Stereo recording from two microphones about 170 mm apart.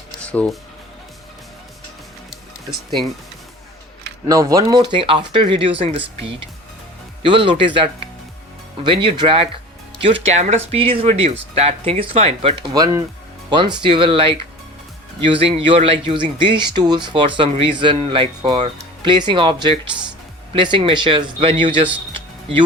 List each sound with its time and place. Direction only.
0.2 s music: 5° left (ahead or behind)
2.3 s music: centre (ahead or behind)
4.3 s speech: 20° right (ahead or behind)
7.2 s speech: 30° right (ahead or behind)
12.7 s speech: 20° right (ahead or behind)
22.1 s music: 30° right (ahead or behind)